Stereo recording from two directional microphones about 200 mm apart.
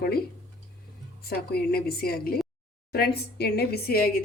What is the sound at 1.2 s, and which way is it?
A woman's voice, 50° left (ahead or behind).